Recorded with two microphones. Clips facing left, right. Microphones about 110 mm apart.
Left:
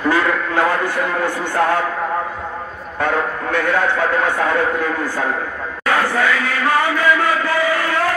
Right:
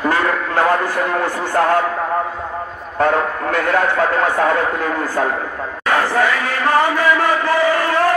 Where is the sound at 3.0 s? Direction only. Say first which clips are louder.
Right 3 dB; 40° right (ahead or behind).